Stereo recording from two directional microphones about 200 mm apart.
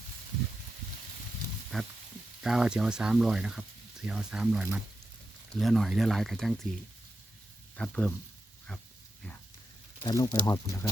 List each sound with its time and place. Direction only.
1.7 s speech: centre (ahead or behind)
7.8 s speech: 5° left (ahead or behind)
10.0 s speech: 20° left (ahead or behind)